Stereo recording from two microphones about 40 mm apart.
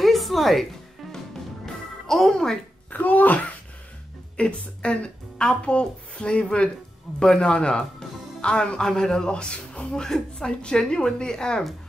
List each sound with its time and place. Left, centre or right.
0.0 s music: centre
2.0 s speech: centre
2.9 s speech: left
4.4 s a man's voice: left
9.9 s a man's voice: centre